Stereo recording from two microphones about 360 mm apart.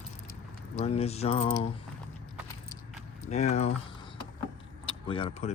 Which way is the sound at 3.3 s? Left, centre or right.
Centre.